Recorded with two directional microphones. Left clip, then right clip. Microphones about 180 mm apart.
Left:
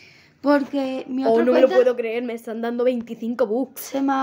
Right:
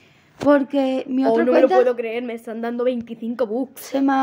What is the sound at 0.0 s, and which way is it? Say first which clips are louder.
Speech: right 4 dB; 40° right (ahead or behind).